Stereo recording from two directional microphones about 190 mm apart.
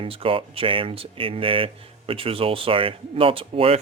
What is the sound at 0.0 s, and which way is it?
Speech, 30° right (ahead or behind).